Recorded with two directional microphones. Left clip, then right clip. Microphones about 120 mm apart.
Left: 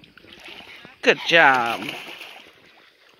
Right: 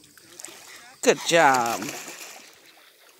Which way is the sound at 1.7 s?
5° right (ahead or behind).